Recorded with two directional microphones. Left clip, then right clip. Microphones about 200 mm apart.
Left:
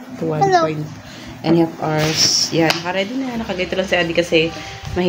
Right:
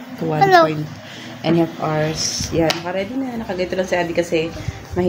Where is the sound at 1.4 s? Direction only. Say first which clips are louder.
Left 2 dB; 5° left (ahead or behind).